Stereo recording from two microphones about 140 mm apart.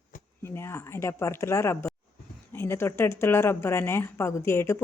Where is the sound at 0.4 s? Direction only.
20° left (ahead or behind).